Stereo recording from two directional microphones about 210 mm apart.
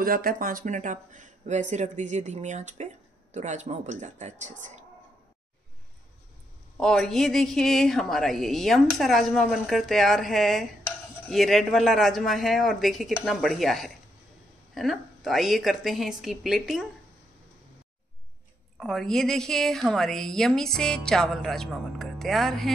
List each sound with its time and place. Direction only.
0.0 s speech: 45° right (ahead or behind)
6.8 s a woman's voice: 5° left (ahead or behind)
18.8 s a woman's voice: centre (ahead or behind)